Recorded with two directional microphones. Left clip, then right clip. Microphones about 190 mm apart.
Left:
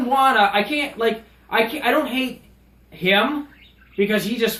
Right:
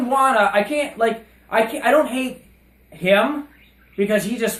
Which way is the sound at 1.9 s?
55° right (ahead or behind).